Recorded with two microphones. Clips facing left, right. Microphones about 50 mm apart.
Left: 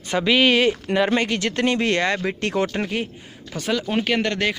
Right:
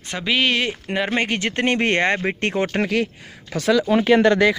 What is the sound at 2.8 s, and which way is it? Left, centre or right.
Speech, right.